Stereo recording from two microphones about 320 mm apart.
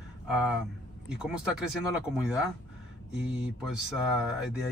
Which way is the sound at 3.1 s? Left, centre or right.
Centre.